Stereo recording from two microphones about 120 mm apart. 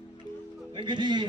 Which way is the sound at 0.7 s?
40° right (ahead or behind).